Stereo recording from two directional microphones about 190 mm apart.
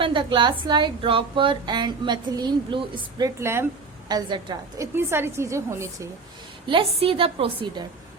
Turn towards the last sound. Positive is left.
turn(degrees=-30)  # may be behind; listen again after turning